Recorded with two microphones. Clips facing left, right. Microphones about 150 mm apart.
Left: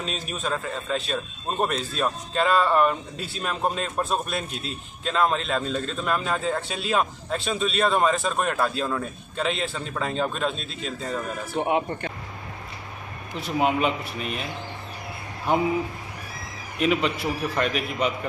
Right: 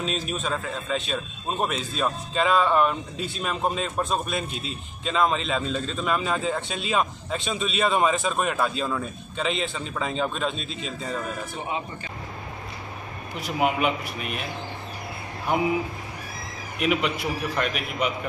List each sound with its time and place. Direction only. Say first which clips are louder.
0.0 s a man's voice: right 2 dB; centre (ahead or behind)
11.5 s speech: left 7 dB; 65° left (ahead or behind)
13.6 s a man's voice: left 1 dB; 5° right (ahead or behind)
16.8 s a man's voice: left 1 dB; 5° right (ahead or behind)